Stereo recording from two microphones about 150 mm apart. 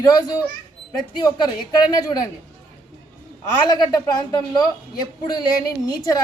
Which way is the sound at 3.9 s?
30° left (ahead or behind).